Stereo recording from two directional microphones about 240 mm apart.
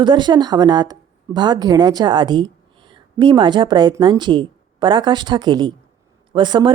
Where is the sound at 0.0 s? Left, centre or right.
Centre.